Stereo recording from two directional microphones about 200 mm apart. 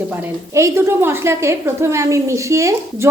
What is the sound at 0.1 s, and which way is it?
A woman's voice, 10° right (ahead or behind).